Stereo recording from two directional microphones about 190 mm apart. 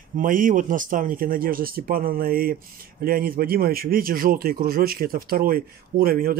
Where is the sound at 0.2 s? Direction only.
45° right (ahead or behind).